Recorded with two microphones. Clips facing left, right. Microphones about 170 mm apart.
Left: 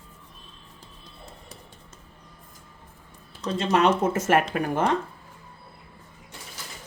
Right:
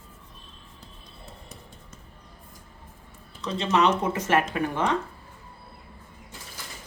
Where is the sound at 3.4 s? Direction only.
45° left (ahead or behind).